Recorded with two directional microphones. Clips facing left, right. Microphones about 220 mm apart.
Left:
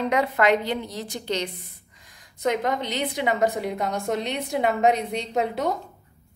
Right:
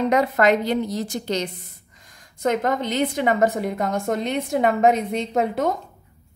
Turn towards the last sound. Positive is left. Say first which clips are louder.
# right 3 dB
turn(degrees=-50)  # may be behind; listen again after turning